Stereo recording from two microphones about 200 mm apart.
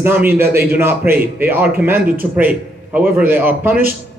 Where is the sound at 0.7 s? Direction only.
10° right (ahead or behind).